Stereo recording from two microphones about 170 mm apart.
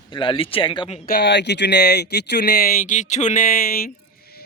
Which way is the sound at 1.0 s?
75° left (ahead or behind).